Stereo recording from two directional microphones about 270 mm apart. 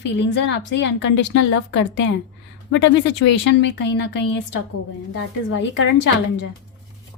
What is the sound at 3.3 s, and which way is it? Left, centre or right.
Speech, left.